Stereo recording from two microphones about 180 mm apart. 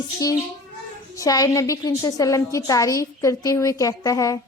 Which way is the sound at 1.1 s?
20° left (ahead or behind).